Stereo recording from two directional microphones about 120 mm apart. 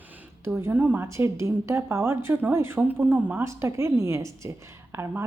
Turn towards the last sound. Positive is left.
turn(degrees=-20)  # may be behind; listen again after turning